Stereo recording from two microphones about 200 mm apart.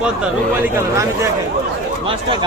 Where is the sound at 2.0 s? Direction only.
25° right (ahead or behind).